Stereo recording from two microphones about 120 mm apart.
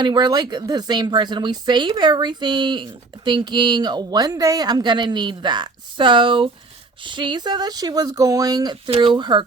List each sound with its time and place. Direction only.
0.0 s speech: 35° right (ahead or behind)
8.9 s speech: 45° right (ahead or behind)